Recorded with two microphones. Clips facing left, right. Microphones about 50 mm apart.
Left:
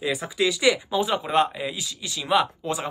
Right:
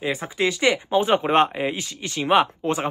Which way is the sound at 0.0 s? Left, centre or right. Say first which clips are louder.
Right 1 dB; right.